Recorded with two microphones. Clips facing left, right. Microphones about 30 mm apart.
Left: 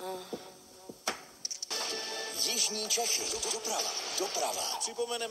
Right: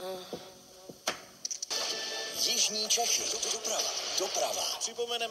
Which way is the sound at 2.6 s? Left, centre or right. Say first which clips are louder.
Right 2 dB; right.